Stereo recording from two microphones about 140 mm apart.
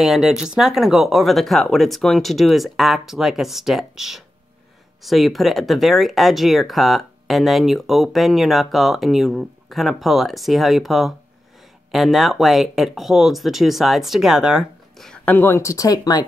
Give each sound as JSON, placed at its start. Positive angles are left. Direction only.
{"t": 0.0, "sound": "speech", "side_deg": 0}
{"t": 15.3, "sound": "speech", "side_deg": 20}